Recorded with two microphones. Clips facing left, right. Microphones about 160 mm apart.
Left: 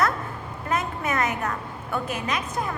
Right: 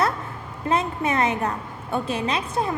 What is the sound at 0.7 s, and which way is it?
A woman's voice, 30° right (ahead or behind).